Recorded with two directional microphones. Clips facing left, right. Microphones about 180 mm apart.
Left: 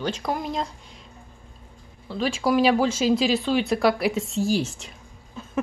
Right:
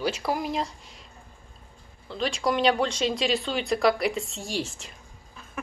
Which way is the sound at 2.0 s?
5° left (ahead or behind).